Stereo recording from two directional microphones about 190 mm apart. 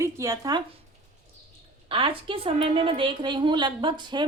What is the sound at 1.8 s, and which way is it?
A woman's voice, 25° right (ahead or behind).